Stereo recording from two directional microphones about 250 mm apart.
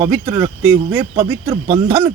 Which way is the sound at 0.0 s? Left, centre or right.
Centre.